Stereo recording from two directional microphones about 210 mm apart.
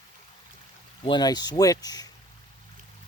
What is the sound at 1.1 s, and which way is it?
Speech, 20° left (ahead or behind).